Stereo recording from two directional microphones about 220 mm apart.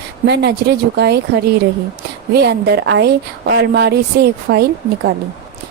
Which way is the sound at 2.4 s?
50° right (ahead or behind).